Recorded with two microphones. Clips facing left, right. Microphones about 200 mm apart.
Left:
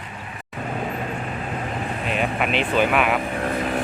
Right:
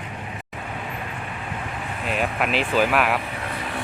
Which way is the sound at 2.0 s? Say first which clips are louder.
Even; centre (ahead or behind).